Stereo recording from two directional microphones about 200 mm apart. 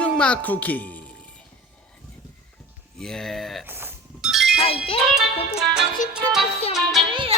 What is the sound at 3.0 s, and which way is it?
Music, 5° left (ahead or behind).